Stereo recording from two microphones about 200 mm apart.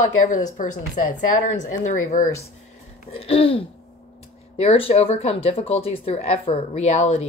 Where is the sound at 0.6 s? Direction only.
40° left (ahead or behind).